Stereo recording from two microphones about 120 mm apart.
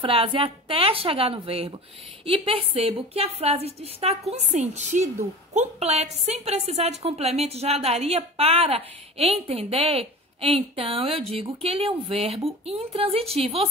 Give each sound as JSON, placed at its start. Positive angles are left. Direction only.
{"t": 0.0, "sound": "a woman's voice", "side_deg": -50}